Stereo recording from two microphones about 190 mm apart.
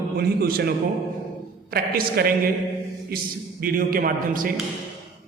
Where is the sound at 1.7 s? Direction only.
55° right (ahead or behind).